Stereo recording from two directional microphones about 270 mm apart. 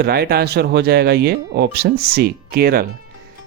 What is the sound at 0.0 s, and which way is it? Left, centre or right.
Speech, right.